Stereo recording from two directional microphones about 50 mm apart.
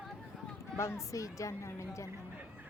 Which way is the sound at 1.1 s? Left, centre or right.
Left.